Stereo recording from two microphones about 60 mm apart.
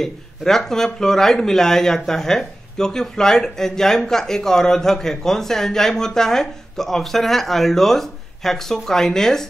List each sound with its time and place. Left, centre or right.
0.0 s speech: centre